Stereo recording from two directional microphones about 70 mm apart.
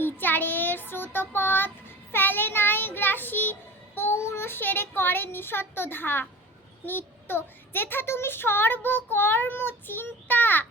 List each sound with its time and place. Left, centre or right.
0.0 s a child's voice: left
2.1 s child singing: left
6.8 s a child's voice: left